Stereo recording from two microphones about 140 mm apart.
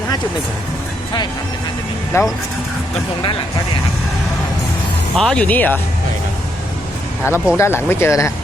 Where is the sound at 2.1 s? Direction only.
20° left (ahead or behind).